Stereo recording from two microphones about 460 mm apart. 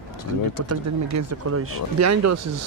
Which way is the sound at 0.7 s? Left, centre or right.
Right.